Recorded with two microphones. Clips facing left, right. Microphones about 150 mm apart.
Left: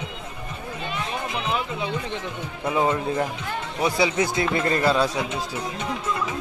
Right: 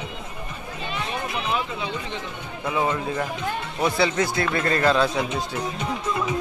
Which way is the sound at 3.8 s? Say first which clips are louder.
Even; 10° left (ahead or behind).